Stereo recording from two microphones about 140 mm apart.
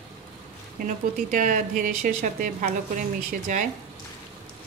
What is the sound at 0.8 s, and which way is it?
Speech, 70° right (ahead or behind).